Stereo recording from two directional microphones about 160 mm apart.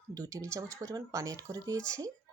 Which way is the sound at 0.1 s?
20° right (ahead or behind).